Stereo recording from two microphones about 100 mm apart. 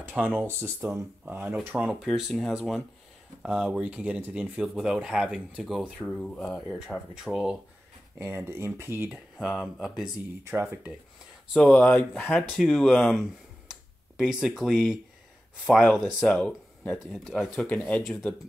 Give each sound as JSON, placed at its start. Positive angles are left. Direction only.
{"t": 0.0, "sound": "speech", "side_deg": -15}
{"t": 2.0, "sound": "speech", "side_deg": 0}
{"t": 3.4, "sound": "speech", "side_deg": -5}
{"t": 5.9, "sound": "speech", "side_deg": 10}
{"t": 8.2, "sound": "speech", "side_deg": -25}
{"t": 9.8, "sound": "speech", "side_deg": 0}
{"t": 11.7, "sound": "speech", "side_deg": 15}
{"t": 12.5, "sound": "speech", "side_deg": 0}
{"t": 17.0, "sound": "speech", "side_deg": 0}
{"t": 17.6, "sound": "speech", "side_deg": 15}
{"t": 18.0, "sound": "speech", "side_deg": 0}